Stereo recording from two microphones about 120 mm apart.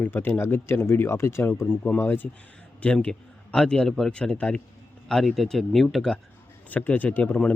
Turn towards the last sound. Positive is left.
turn(degrees=15)  # may be behind; listen again after turning